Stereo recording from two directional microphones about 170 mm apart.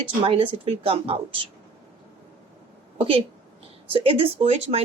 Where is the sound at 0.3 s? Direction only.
30° right (ahead or behind).